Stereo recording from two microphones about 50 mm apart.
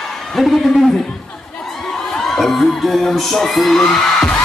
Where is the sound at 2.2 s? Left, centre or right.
Centre.